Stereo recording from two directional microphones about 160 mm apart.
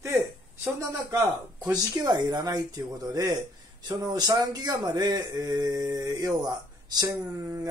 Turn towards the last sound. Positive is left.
turn(degrees=-15)  # may be behind; listen again after turning